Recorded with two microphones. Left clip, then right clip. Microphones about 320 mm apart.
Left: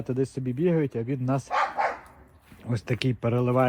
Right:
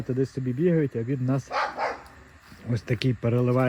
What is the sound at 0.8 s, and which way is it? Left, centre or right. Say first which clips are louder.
Speech: right 1 dB; left.